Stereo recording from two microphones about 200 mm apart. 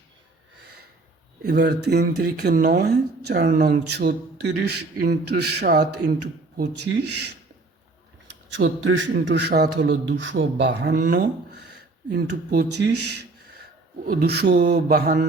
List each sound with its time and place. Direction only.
1.4 s a man's voice: 55° right (ahead or behind)
3.4 s speech: 40° right (ahead or behind)
3.7 s a man's voice: 55° right (ahead or behind)
8.5 s a man's voice: 70° right (ahead or behind); by 15.3 s 45° right (ahead or behind)